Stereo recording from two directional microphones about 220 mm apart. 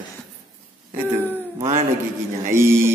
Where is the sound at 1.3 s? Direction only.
15° right (ahead or behind).